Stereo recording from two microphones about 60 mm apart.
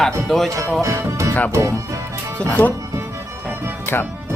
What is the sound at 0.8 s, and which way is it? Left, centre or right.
Speech, right.